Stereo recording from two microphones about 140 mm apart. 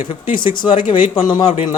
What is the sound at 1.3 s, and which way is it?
Speech, 35° left (ahead or behind).